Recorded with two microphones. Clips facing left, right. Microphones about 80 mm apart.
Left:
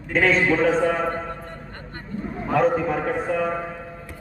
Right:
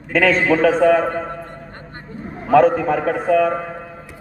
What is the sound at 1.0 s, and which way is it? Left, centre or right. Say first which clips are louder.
Speech: right 4 dB; right.